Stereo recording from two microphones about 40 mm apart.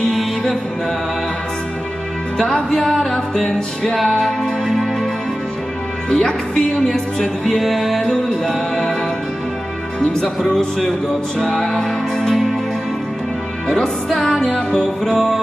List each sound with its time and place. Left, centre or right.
2.3 s music: centre
6.0 s music: centre
7.6 s music: centre
8.0 s music: centre
9.9 s music: left
10.4 s music: centre
13.7 s music: centre